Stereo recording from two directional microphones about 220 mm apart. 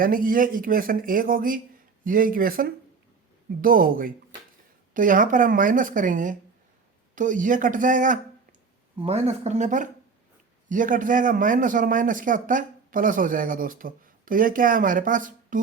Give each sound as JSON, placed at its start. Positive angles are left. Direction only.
{"t": 0.0, "sound": "a man's voice", "side_deg": -40}